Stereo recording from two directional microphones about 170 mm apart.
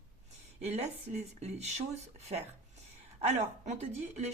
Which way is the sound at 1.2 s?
40° right (ahead or behind).